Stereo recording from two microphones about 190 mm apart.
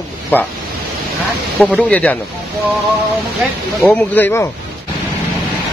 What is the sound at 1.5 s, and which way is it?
Speech, 5° left (ahead or behind).